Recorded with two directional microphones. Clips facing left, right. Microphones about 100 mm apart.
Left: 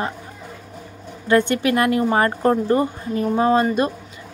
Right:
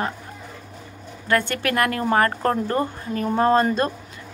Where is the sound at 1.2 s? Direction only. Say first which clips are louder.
Left 5 dB; 20° left (ahead or behind).